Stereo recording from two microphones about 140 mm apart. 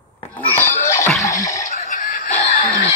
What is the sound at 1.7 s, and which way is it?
Snicker, 65° left (ahead or behind).